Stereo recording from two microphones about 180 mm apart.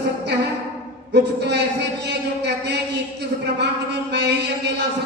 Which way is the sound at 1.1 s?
70° right (ahead or behind).